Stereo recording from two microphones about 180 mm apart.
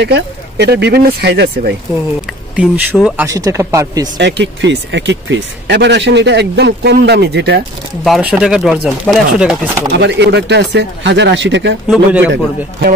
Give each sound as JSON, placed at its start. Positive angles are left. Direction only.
{"t": 0.0, "sound": "speech", "side_deg": -70}
{"t": 2.5, "sound": "speech", "side_deg": -10}
{"t": 3.3, "sound": "speech", "side_deg": -20}
{"t": 4.2, "sound": "speech", "side_deg": -75}
{"t": 8.0, "sound": "speech", "side_deg": 0}
{"t": 9.9, "sound": "speech", "side_deg": -75}
{"t": 11.9, "sound": "speech", "side_deg": -10}